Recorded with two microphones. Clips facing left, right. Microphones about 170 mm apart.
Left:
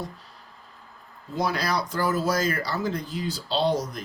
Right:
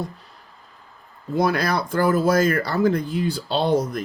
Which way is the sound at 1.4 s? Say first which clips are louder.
Right 5 dB; 55° right (ahead or behind).